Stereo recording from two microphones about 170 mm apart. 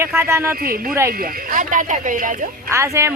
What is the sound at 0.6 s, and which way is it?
Speech, 60° right (ahead or behind).